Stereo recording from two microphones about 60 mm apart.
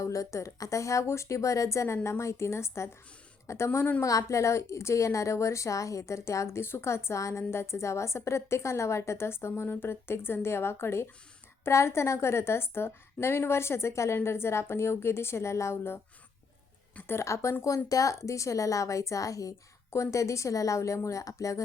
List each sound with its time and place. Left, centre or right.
0.0 s a woman's voice: left
4.0 s a woman's voice: left
17.1 s a woman's voice: left
17.8 s a woman's voice: left